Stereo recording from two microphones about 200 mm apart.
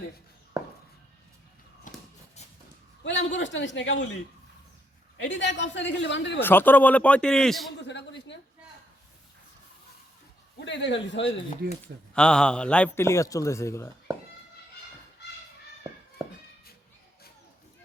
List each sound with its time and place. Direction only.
0.6 s a sound: 15° right (ahead or behind)
1.9 s shuffle: 40° left (ahead or behind)
3.0 s a man's voice: 65° left (ahead or behind)
5.1 s a man's voice: 65° left (ahead or behind)
6.4 s a man's voice: 10° left (ahead or behind)
7.8 s a sound: 60° left (ahead or behind)
10.7 s a man's voice: 60° left (ahead or behind)
12.1 s a man's voice: 5° left (ahead or behind)